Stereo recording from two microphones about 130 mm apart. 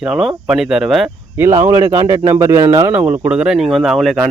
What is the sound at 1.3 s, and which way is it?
Speech, 20° right (ahead or behind).